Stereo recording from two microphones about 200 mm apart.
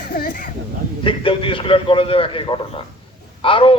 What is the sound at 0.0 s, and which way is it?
Speech, 50° left (ahead or behind).